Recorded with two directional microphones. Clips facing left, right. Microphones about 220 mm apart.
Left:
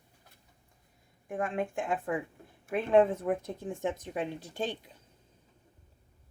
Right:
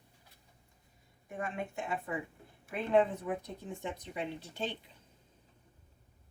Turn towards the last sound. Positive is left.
turn(degrees=45)  # may be behind; listen again after turning